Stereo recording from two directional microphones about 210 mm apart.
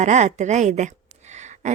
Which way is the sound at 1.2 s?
35° right (ahead or behind).